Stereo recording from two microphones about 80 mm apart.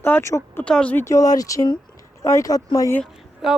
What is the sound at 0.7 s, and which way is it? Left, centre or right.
Speech, centre.